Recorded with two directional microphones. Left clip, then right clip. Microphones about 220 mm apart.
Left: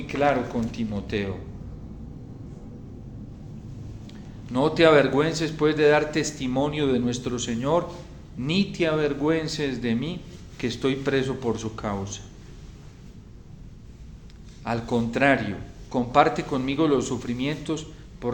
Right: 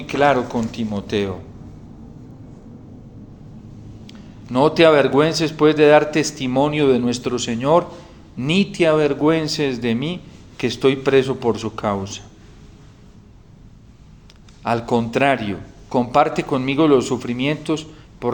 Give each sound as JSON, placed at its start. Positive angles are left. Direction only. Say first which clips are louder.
{"t": 0.1, "sound": "a man's voice", "louder": "right 7 dB", "side_deg": -35}
{"t": 4.5, "sound": "a man's voice", "louder": "right 5 dB", "side_deg": -30}
{"t": 14.6, "sound": "a man's voice", "louder": "right 7 dB", "side_deg": -30}